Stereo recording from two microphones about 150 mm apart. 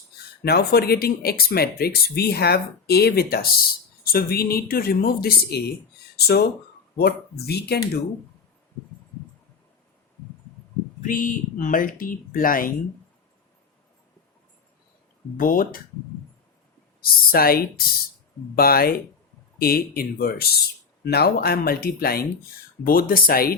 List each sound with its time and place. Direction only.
0.4 s speech: 90° left
11.0 s speech: 65° left (ahead or behind)
15.4 s speech: 65° left (ahead or behind)
17.0 s speech: 80° left
22.8 s speech: 75° left (ahead or behind)